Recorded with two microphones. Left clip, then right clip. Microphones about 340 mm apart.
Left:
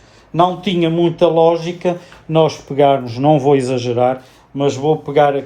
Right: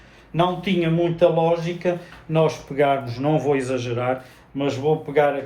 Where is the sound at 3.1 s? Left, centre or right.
Centre.